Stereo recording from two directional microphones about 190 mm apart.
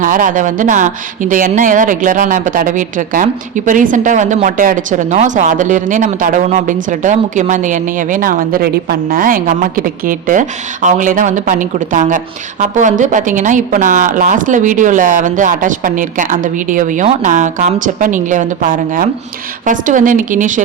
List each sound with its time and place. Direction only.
0.0 s speech: 45° right (ahead or behind)